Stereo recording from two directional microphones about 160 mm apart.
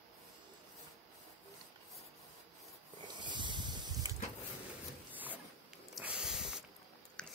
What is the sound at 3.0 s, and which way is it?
Snake, 30° right (ahead or behind).